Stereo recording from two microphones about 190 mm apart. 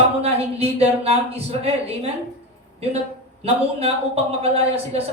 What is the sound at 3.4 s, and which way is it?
Speech, 30° right (ahead or behind).